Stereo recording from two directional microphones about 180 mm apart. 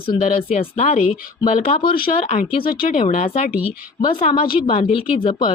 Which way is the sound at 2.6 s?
55° left (ahead or behind).